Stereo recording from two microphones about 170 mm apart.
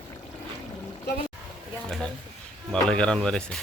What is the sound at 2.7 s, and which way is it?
Speech, 5° left (ahead or behind).